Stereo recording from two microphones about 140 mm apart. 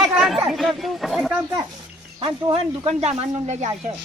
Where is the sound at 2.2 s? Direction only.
35° right (ahead or behind).